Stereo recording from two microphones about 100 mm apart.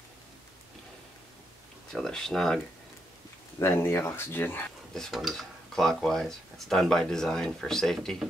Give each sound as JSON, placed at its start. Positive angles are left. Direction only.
{"t": 1.9, "sound": "speech", "side_deg": 5}
{"t": 3.5, "sound": "speech", "side_deg": 25}
{"t": 4.9, "sound": "speech", "side_deg": 0}